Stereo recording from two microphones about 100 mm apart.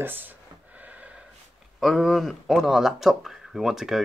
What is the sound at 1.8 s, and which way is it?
Speech, centre (ahead or behind).